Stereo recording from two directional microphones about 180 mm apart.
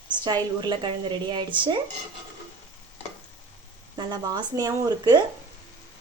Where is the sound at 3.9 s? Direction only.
25° right (ahead or behind).